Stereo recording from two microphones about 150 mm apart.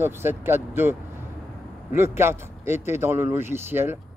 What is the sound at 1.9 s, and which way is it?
Speech, 15° right (ahead or behind).